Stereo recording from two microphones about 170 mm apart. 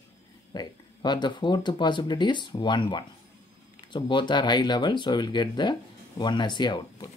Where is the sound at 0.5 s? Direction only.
25° left (ahead or behind).